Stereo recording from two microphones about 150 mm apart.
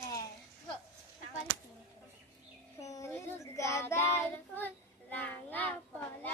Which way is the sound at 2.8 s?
20° left (ahead or behind).